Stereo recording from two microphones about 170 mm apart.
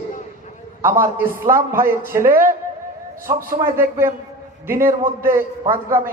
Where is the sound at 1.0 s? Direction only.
15° right (ahead or behind).